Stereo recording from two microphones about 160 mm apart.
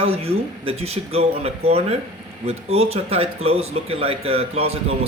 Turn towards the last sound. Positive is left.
turn(degrees=-40)  # may be behind; listen again after turning